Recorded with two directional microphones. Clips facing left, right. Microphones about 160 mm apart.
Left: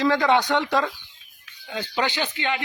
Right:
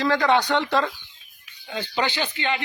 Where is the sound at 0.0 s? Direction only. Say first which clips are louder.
Left 1 dB; 20° left (ahead or behind).